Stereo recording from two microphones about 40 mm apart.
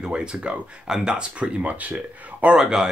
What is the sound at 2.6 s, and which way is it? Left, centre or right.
Speech, centre.